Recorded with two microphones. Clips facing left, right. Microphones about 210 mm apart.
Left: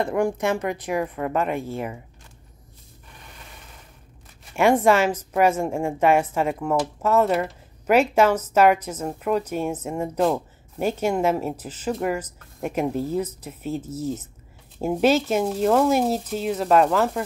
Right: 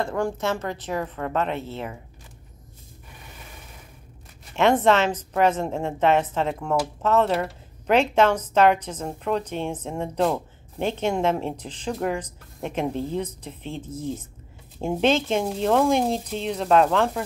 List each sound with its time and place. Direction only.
0.0 s speech: 15° left (ahead or behind)
4.6 s speech: 10° left (ahead or behind)